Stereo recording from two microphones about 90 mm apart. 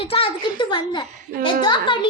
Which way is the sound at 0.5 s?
55° left (ahead or behind).